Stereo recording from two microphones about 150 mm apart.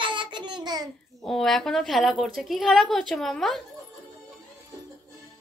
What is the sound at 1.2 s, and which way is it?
A woman's voice, centre (ahead or behind).